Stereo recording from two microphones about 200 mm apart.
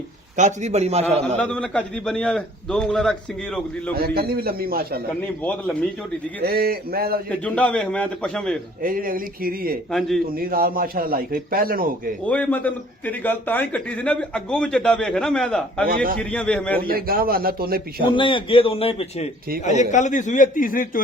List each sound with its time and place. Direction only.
0.3 s a man's voice: 35° right (ahead or behind)
1.4 s a man's voice: 5° left (ahead or behind)
3.9 s a man's voice: 50° right (ahead or behind)
5.4 s a man's voice: 5° left (ahead or behind)
6.4 s a man's voice: 50° right (ahead or behind)
7.3 s a man's voice: 5° left (ahead or behind)
8.8 s a man's voice: 45° right (ahead or behind)
12.2 s a man's voice: 5° left (ahead or behind)
16.8 s a man's voice: 50° right (ahead or behind)
18.0 s a man's voice: 25° left (ahead or behind); by 21.0 s 45° left (ahead or behind)